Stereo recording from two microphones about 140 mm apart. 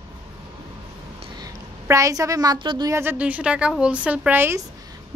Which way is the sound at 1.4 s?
25° right (ahead or behind).